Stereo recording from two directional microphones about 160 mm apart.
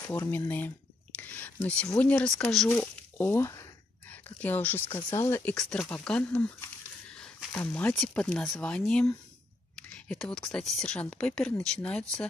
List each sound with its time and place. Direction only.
0.0 s speech: 20° left (ahead or behind)
1.1 s whispering: 10° left (ahead or behind)
2.0 s speech: 10° left (ahead or behind)
9.8 s a sound: 5° left (ahead or behind)
10.5 s speech: centre (ahead or behind)